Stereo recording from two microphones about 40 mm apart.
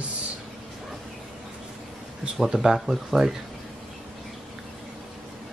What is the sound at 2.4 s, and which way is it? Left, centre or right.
Speech, centre.